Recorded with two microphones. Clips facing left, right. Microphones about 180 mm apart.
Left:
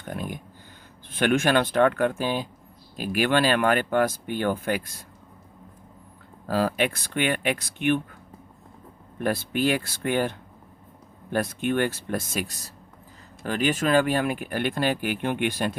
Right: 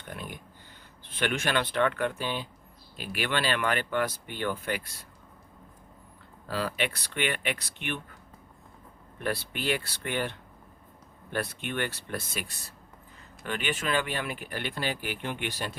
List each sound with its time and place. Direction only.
0.0 s a sound: 45° left (ahead or behind)
1.0 s speech: 45° left (ahead or behind)
6.5 s speech: 45° left (ahead or behind)
9.1 s speech: 45° left (ahead or behind)